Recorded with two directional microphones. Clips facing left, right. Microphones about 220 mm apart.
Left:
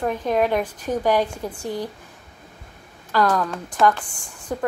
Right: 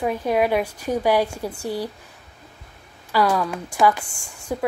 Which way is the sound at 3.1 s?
10° right (ahead or behind).